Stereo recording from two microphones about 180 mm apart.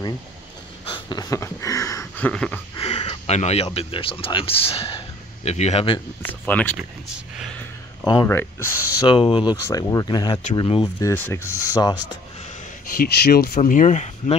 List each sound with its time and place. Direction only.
0.8 s a sound: 25° left (ahead or behind); by 2.6 s 5° left (ahead or behind)
2.8 s speech: 35° left (ahead or behind)
6.2 s rub: 10° left (ahead or behind)
8.0 s speech: 20° left (ahead or behind)
11.0 s rub: 15° left (ahead or behind)
12.9 s speech: 60° left (ahead or behind)
13.6 s speech: 45° left (ahead or behind)